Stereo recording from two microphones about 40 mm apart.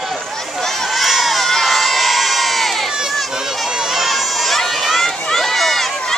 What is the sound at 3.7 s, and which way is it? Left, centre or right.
Run, centre.